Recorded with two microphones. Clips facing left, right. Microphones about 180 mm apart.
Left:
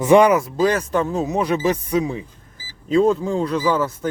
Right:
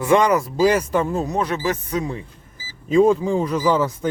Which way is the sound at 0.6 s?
10° right (ahead or behind).